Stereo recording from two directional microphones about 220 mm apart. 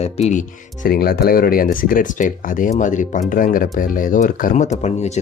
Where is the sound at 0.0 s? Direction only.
30° left (ahead or behind).